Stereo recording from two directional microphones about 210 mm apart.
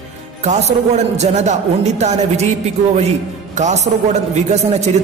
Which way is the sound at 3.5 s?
35° right (ahead or behind).